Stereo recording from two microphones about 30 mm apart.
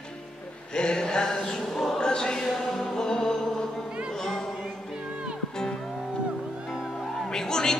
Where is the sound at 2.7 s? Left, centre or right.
Centre.